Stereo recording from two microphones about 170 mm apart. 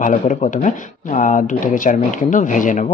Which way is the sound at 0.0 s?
50° left (ahead or behind).